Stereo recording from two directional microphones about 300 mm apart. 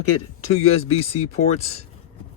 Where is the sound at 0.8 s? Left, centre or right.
Centre.